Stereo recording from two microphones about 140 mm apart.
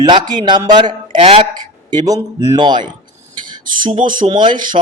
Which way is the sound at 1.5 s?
30° right (ahead or behind).